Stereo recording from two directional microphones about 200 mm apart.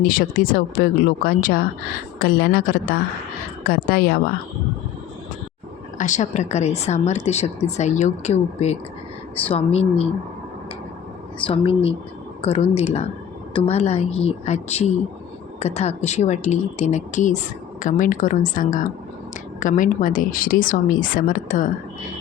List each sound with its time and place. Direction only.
0.0 s speech: 45° left (ahead or behind)
6.0 s a woman's voice: 35° left (ahead or behind)
11.4 s a woman's voice: 30° left (ahead or behind)